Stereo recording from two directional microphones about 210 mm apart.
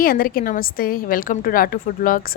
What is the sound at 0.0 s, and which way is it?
A woman's voice, 45° left (ahead or behind).